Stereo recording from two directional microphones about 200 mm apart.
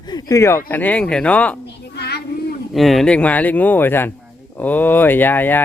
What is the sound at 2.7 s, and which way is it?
Speech, centre (ahead or behind).